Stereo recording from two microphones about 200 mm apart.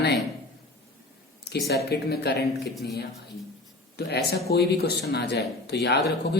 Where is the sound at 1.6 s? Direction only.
55° left (ahead or behind).